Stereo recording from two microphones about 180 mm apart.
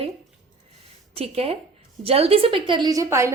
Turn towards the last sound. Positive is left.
turn(degrees=-15)  # may be behind; listen again after turning